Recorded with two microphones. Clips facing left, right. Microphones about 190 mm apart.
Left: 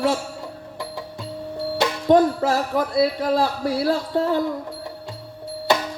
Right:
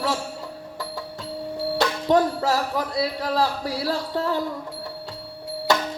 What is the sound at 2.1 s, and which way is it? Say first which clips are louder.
Speech: left 4 dB; 50° left (ahead or behind).